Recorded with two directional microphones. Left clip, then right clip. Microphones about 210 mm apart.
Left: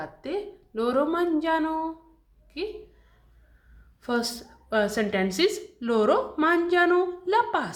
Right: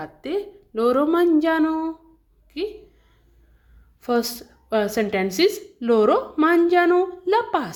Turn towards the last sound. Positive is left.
turn(degrees=-35)  # may be behind; listen again after turning